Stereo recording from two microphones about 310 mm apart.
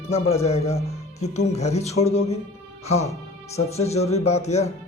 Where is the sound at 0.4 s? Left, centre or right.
Centre.